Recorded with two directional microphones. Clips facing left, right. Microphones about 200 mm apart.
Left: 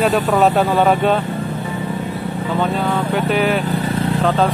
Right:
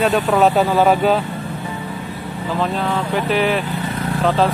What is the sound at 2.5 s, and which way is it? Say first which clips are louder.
Speech: left 1 dB; centre (ahead or behind).